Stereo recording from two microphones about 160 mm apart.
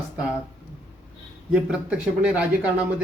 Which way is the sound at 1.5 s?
5° right (ahead or behind).